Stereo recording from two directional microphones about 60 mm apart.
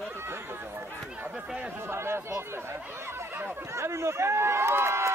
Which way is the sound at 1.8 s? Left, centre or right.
Right.